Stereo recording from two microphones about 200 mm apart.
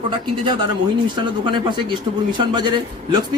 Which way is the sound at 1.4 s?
25° right (ahead or behind).